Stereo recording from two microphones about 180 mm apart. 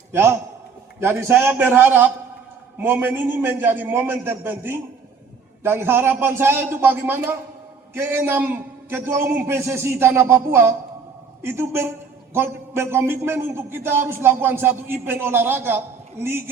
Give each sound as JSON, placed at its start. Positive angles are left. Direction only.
{"t": 0.1, "sound": "a man's voice", "side_deg": -15}